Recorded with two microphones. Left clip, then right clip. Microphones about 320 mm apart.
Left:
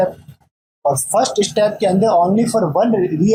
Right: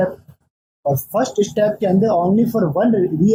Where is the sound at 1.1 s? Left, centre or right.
Centre.